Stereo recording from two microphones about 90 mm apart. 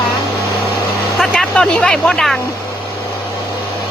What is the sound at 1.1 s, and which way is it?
Speech, 5° left (ahead or behind).